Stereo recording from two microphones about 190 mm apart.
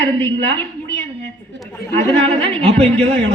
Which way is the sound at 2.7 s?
35° right (ahead or behind).